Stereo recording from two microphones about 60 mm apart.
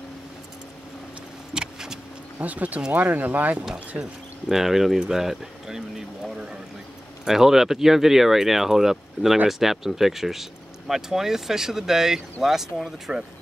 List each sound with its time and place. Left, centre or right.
1.5 s vehicle: centre
2.4 s speech: right
4.0 s speech: centre
6.3 s a sound: centre
7.2 s speech: centre